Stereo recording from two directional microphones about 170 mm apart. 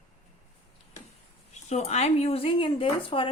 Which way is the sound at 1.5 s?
40° left (ahead or behind).